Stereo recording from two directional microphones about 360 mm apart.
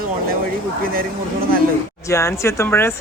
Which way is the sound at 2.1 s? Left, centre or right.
Centre.